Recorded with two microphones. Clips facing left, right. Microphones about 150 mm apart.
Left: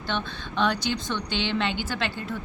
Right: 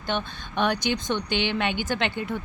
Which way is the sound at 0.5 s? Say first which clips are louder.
Right 1 dB; 55° right (ahead or behind).